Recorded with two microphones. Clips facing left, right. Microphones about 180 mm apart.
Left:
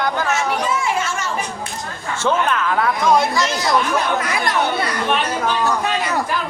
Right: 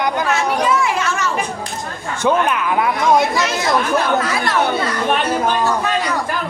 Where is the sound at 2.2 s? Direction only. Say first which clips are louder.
Right 2 dB; 15° right (ahead or behind).